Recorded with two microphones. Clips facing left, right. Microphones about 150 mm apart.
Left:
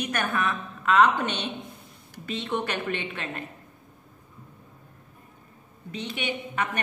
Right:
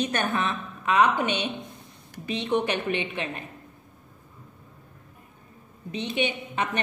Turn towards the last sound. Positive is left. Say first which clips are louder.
# right 3 dB
turn(degrees=-20)  # may be behind; listen again after turning